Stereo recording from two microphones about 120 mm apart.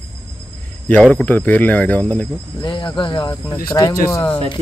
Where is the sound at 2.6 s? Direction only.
40° left (ahead or behind).